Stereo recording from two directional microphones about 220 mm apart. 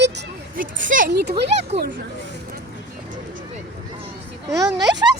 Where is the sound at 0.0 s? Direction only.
45° right (ahead or behind).